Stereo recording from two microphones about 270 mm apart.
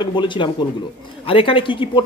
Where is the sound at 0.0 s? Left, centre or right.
Centre.